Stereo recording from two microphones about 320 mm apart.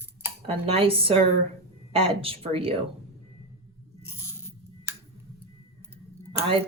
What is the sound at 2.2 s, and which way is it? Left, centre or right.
Speech, centre.